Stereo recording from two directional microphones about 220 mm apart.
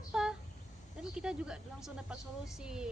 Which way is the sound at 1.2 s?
5° right (ahead or behind).